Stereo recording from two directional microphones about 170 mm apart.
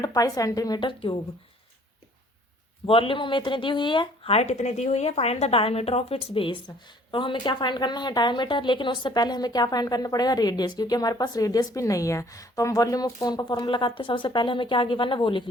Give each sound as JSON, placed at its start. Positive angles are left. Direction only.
{"t": 0.0, "sound": "speech", "side_deg": 20}
{"t": 2.8, "sound": "speech", "side_deg": 30}